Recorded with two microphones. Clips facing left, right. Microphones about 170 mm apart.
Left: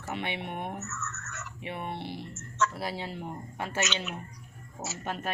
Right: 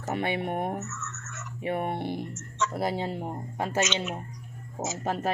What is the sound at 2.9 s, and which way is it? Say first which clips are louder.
Speech: right 5 dB; 30° right (ahead or behind).